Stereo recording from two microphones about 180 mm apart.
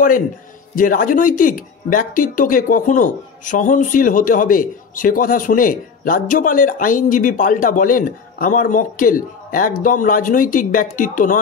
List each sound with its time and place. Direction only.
0.7 s speech: 50° left (ahead or behind)